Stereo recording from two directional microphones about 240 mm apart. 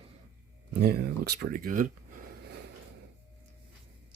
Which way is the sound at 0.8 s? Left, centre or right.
Right.